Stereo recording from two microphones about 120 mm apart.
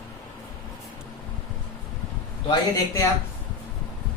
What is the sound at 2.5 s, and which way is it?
Speech, 30° left (ahead or behind).